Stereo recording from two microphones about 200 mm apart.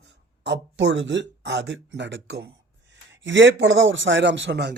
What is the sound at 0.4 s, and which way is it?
A man's voice, 60° right (ahead or behind).